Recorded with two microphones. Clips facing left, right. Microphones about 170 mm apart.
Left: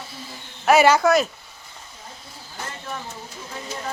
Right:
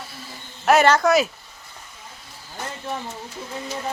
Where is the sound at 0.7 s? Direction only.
5° left (ahead or behind).